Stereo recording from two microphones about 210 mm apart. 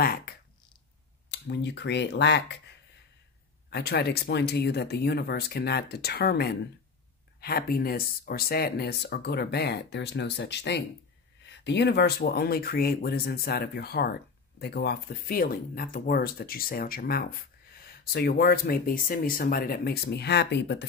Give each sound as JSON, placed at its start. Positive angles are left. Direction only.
{"t": 0.0, "sound": "a sound", "side_deg": 45}
{"t": 1.3, "sound": "speech", "side_deg": 55}
{"t": 3.7, "sound": "speech", "side_deg": 50}